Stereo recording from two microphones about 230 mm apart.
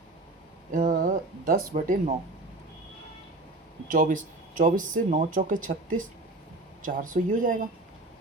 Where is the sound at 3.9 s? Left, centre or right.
Right.